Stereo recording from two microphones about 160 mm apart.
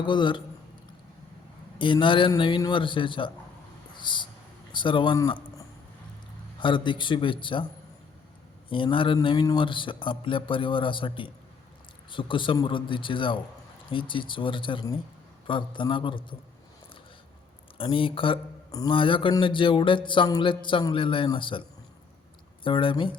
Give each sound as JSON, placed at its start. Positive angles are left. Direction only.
{"t": 0.0, "sound": "speech", "side_deg": 30}
{"t": 1.8, "sound": "speech", "side_deg": 30}
{"t": 4.0, "sound": "a sound", "side_deg": 30}
{"t": 4.7, "sound": "speech", "side_deg": 30}
{"t": 6.6, "sound": "speech", "side_deg": 30}
{"t": 8.7, "sound": "speech", "side_deg": 30}
{"t": 17.7, "sound": "speech", "side_deg": 35}
{"t": 22.6, "sound": "speech", "side_deg": 30}